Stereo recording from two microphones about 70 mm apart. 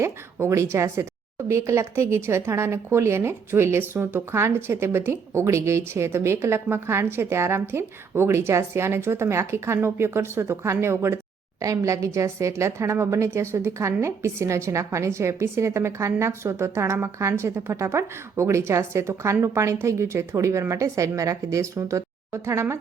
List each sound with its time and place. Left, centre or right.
0.0 s speech: right
11.6 s a woman's voice: right